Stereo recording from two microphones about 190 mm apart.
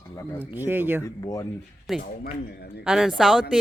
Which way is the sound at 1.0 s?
20° left (ahead or behind).